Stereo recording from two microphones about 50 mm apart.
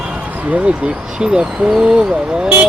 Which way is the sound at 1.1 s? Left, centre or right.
Centre.